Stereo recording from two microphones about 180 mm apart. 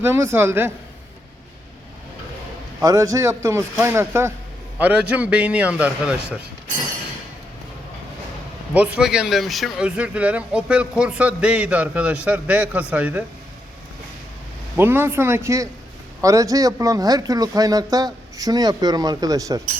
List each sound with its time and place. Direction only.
0.0 s speech: 15° right (ahead or behind)
2.8 s speech: 20° right (ahead or behind)
9.0 s speech: 5° right (ahead or behind)
14.8 s speech: 10° right (ahead or behind)